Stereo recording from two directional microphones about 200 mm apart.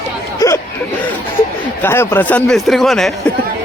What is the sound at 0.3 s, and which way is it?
Chatter, 15° left (ahead or behind).